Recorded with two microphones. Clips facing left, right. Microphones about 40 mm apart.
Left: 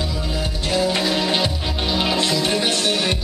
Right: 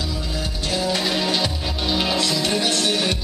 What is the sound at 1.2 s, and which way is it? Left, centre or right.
Music, centre.